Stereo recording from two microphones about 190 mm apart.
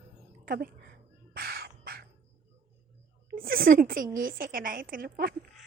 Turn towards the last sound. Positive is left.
turn(degrees=-50)  # may be behind; listen again after turning